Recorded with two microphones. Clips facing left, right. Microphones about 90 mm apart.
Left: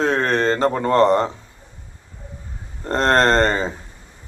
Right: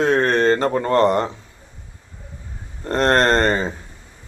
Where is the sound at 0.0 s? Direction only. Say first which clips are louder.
Right 2 dB; 35° left (ahead or behind).